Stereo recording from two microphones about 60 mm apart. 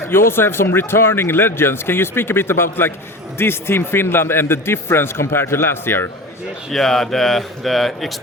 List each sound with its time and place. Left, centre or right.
0.1 s speech: left
6.7 s a man's voice: centre